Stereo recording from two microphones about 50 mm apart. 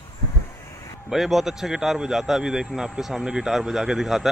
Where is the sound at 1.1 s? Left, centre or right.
Centre.